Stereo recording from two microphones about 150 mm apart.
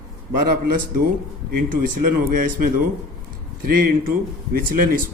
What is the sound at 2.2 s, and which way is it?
Speech, 70° right (ahead or behind).